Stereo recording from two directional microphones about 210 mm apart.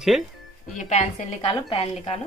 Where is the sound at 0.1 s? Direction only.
Centre (ahead or behind).